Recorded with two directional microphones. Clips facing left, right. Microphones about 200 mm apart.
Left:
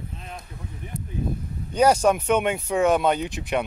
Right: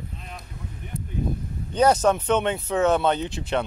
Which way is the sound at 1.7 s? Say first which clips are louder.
Left 1 dB; 10° left (ahead or behind).